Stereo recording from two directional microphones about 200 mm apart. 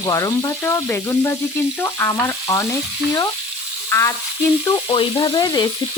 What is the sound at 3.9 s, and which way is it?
Frying, 15° left (ahead or behind).